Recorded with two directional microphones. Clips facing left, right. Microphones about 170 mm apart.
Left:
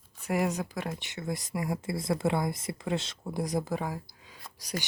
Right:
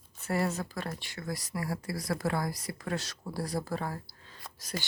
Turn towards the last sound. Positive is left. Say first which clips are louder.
# left 2 dB
turn(degrees=15)  # may be behind; listen again after turning